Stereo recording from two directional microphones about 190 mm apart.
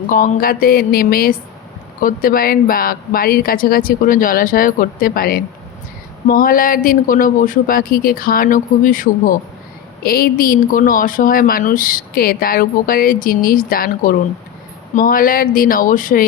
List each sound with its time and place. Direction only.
0.1 s speech: 45° left (ahead or behind)